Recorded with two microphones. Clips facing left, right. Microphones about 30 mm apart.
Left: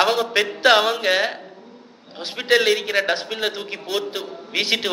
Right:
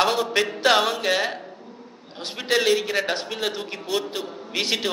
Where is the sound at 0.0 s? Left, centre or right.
Centre.